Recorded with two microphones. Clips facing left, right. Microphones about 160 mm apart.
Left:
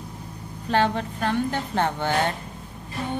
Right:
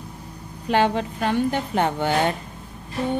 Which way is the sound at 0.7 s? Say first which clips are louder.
Right 2 dB; 15° right (ahead or behind).